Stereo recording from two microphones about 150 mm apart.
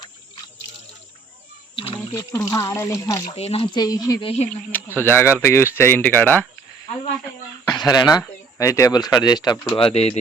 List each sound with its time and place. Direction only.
1.7 s wild animals: 40° left (ahead or behind)
2.1 s speech: 20° left (ahead or behind)
3.2 s speech: 45° left (ahead or behind)
3.8 s speech: 25° left (ahead or behind)
4.2 s speech: 40° left (ahead or behind)
4.9 s speech: 15° left (ahead or behind)
7.7 s speech: 25° left (ahead or behind); by 10.2 s 45° left (ahead or behind)